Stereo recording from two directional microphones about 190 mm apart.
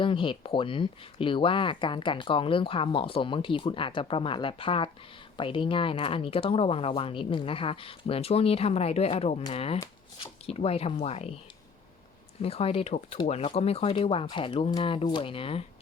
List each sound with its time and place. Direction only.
0.0 s speech: 25° left (ahead or behind)
12.4 s speech: 30° left (ahead or behind)